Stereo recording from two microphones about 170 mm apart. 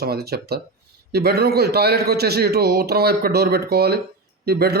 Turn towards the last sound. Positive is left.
turn(degrees=-65)  # may be behind; listen again after turning